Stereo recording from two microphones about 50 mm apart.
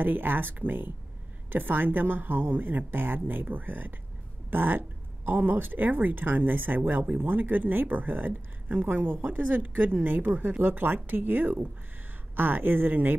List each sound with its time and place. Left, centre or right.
0.0 s speech: right